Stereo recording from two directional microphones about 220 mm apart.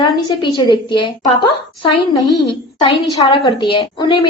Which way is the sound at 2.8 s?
20° left (ahead or behind).